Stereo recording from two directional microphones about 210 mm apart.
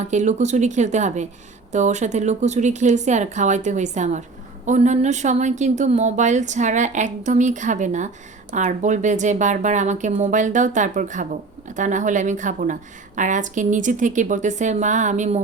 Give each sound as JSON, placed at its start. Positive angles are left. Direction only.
{"t": 0.0, "sound": "a woman's voice", "side_deg": -35}